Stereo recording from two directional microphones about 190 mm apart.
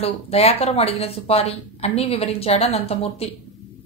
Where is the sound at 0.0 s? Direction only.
30° left (ahead or behind).